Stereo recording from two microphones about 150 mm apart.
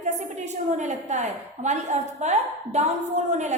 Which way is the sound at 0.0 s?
50° right (ahead or behind).